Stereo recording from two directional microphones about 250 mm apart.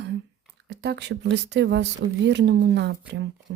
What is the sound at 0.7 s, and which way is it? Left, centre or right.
Speech, right.